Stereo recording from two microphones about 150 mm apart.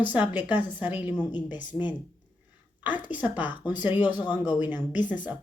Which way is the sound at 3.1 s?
10° right (ahead or behind).